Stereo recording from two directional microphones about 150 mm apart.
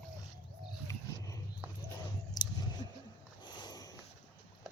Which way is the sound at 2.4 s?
25° left (ahead or behind).